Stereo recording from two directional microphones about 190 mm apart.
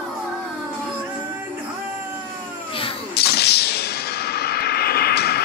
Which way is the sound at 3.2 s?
60° left (ahead or behind).